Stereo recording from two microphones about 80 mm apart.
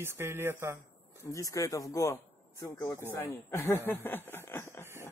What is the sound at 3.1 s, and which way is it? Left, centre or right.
Speech, left.